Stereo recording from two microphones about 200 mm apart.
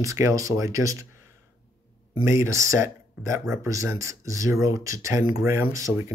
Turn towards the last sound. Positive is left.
turn(degrees=-15)  # may be behind; listen again after turning